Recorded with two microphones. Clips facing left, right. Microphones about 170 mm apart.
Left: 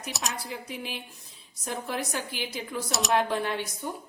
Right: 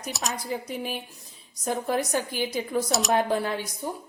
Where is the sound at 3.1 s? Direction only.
40° right (ahead or behind).